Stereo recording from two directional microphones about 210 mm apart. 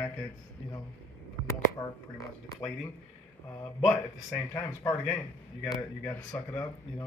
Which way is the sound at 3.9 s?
15° left (ahead or behind).